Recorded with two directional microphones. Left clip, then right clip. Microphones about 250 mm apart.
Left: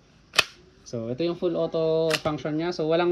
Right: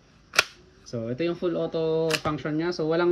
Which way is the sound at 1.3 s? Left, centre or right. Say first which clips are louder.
Left 2 dB; left.